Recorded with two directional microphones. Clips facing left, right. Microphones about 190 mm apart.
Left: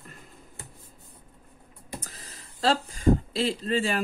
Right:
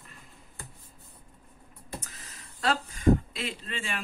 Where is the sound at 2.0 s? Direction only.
35° left (ahead or behind).